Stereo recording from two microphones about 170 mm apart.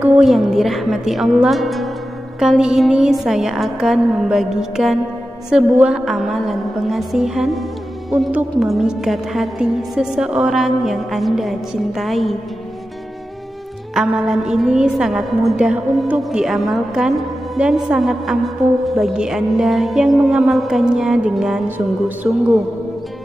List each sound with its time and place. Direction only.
0.0 s a woman's voice: 5° right (ahead or behind)
13.9 s a woman's voice: 5° right (ahead or behind)